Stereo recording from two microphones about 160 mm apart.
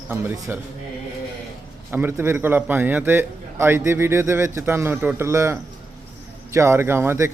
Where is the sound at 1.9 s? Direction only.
15° right (ahead or behind).